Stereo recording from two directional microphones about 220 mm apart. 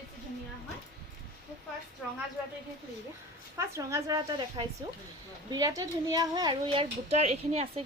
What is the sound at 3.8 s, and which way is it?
A woman's voice, 15° right (ahead or behind).